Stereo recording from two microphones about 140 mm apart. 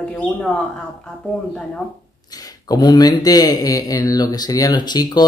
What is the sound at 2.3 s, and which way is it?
Speech, 30° left (ahead or behind).